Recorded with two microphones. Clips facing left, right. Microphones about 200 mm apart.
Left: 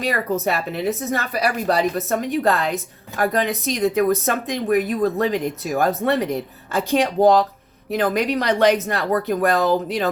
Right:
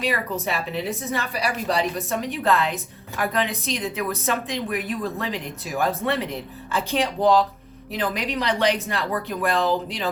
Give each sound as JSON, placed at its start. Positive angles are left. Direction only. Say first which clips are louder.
{"t": 0.4, "sound": "a woman's voice", "louder": "left 5 dB", "side_deg": 40}